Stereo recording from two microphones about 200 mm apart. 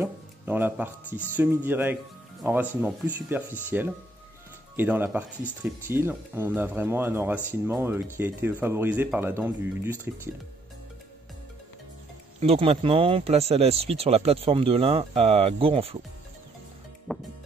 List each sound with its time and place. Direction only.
0.0 s speech: 10° right (ahead or behind)
12.4 s speech: 30° right (ahead or behind)
17.1 s music: centre (ahead or behind)